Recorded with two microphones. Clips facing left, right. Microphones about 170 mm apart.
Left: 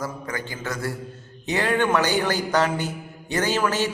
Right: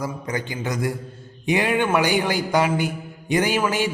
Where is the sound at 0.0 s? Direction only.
20° right (ahead or behind).